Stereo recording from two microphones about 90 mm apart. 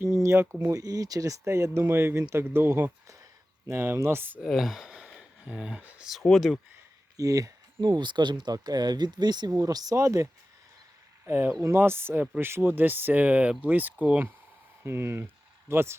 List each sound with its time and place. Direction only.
0.0 s speech: 35° right (ahead or behind)
0.8 s speech: 40° right (ahead or behind); by 4.4 s 25° right (ahead or behind)
4.4 s speech: centre (ahead or behind)
7.2 s speech: 40° right (ahead or behind)
7.8 s speech: 55° right (ahead or behind); by 10.2 s 35° right (ahead or behind)
11.3 s speech: 25° right (ahead or behind)
14.8 s speech: 25° right (ahead or behind)